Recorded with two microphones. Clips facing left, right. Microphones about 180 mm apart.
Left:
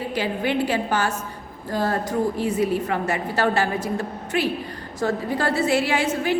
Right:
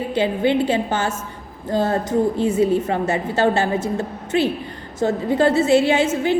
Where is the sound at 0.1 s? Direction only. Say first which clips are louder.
Right 7 dB; 25° right (ahead or behind).